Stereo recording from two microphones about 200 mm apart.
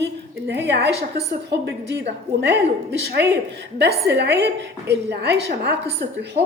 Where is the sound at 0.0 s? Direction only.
60° right (ahead or behind).